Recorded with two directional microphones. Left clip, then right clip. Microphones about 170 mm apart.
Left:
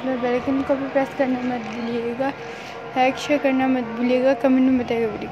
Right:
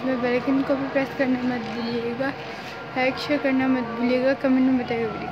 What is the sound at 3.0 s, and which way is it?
A woman's voice, 15° left (ahead or behind).